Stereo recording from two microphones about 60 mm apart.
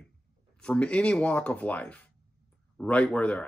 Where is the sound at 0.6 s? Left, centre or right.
Centre.